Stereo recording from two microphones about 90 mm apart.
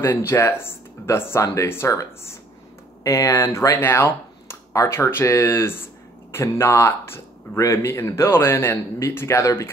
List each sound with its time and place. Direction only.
0.0 s a man's voice: 25° left (ahead or behind)